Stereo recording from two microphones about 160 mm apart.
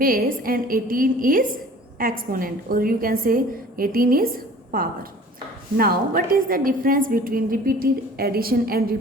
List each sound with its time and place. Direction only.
0.0 s a woman's voice: 65° right (ahead or behind)
5.7 s a woman's voice: 65° right (ahead or behind)